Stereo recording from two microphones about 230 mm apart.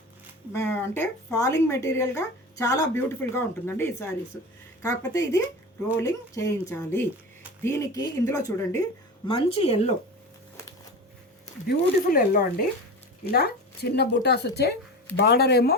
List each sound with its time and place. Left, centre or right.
0.5 s a woman's voice: centre; by 9.9 s left
11.7 s speech: left